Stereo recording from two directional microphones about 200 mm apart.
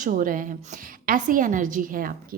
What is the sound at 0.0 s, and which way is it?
Speech, 45° right (ahead or behind).